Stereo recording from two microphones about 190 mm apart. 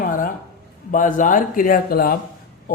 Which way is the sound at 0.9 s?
45° left (ahead or behind).